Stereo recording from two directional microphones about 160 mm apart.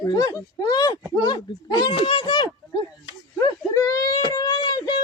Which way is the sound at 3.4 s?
20° left (ahead or behind).